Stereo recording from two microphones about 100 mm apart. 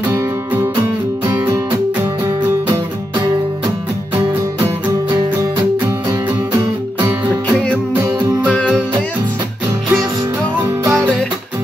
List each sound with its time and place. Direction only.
1.2 s music: 30° right (ahead or behind)
10.6 s music: 35° right (ahead or behind)